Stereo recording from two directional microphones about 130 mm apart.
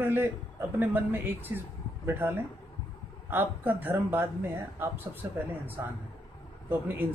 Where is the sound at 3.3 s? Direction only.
15° right (ahead or behind).